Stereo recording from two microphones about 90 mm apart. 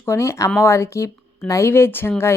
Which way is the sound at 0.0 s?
30° left (ahead or behind).